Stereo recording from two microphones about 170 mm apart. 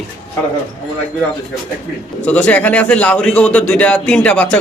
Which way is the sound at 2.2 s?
10° left (ahead or behind).